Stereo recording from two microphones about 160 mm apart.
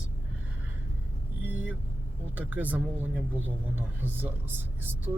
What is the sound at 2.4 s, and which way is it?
Speech, 10° right (ahead or behind).